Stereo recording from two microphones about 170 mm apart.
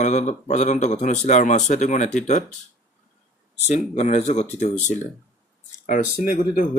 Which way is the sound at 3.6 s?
40° left (ahead or behind).